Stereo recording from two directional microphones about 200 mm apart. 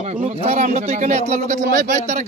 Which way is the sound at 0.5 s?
35° right (ahead or behind).